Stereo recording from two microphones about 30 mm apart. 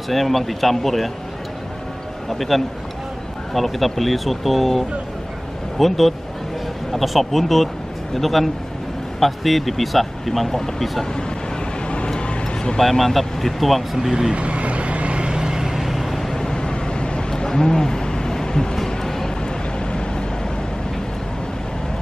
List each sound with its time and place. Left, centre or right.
0.1 s speech: centre
2.2 s speech: centre
12.2 s a sound: left
12.7 s speech: centre
14.3 s vehicle: right
15.7 s vehicle: centre
16.3 s vehicle: left
17.5 s a sound: centre
19.0 s vehicle: centre